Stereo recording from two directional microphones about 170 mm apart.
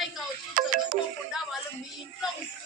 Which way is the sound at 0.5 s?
55° right (ahead or behind).